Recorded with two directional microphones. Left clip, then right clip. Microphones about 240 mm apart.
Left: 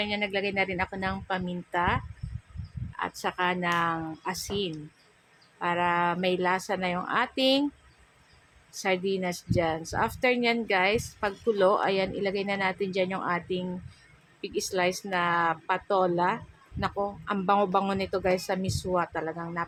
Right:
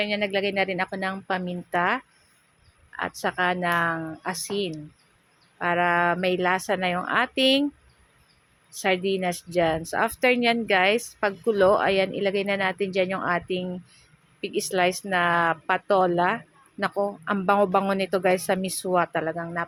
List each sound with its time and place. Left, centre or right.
0.0 s a woman's voice: centre
8.7 s a woman's voice: centre